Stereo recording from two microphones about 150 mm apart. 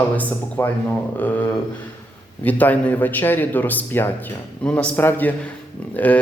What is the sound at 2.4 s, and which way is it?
A man's voice, 10° left (ahead or behind).